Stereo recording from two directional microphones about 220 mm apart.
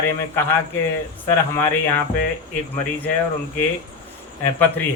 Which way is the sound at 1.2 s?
10° left (ahead or behind).